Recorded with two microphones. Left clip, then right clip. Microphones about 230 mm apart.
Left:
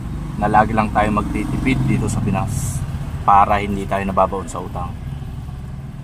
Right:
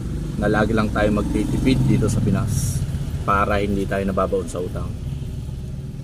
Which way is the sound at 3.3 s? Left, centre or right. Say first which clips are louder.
Left 6 dB; left.